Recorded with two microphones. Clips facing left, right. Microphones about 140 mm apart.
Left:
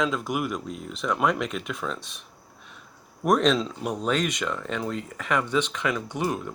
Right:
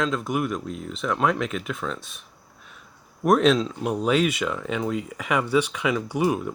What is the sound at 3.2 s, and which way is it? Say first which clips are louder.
Speech: right 3 dB; 5° right (ahead or behind).